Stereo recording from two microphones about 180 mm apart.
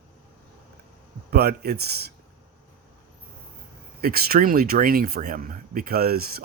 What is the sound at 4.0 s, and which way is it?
Speech, 55° right (ahead or behind).